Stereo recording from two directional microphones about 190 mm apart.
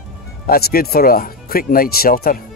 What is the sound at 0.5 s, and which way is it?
Speech, 50° left (ahead or behind).